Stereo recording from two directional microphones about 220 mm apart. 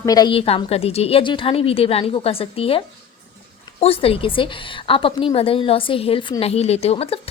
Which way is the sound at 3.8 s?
25° left (ahead or behind).